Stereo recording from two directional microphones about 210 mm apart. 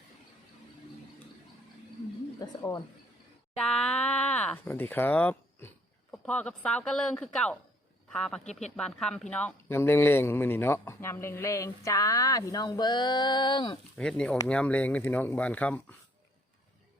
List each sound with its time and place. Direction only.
2.4 s speech: 15° left (ahead or behind)
3.7 s speech: centre (ahead or behind); by 13.7 s 20° left (ahead or behind)
13.9 s speech: 5° left (ahead or behind)